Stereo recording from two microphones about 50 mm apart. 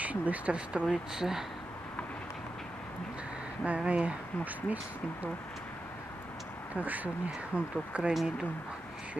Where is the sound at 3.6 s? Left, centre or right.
Right.